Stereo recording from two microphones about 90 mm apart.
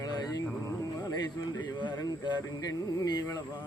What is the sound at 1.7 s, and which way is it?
Music, 50° left (ahead or behind).